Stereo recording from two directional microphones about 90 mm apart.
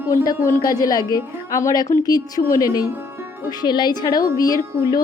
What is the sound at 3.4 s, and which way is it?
A woman's voice, 55° left (ahead or behind).